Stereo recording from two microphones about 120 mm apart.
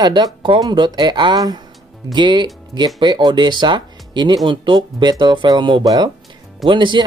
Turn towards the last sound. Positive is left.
turn(degrees=-40)  # may be behind; listen again after turning